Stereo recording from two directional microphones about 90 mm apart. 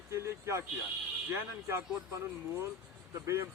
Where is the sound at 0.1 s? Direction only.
35° right (ahead or behind).